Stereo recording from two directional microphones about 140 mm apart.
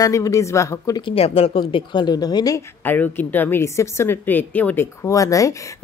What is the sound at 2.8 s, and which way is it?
A woman's voice, 15° left (ahead or behind).